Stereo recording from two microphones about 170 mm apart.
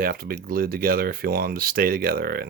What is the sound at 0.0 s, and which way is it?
Speech, 60° right (ahead or behind).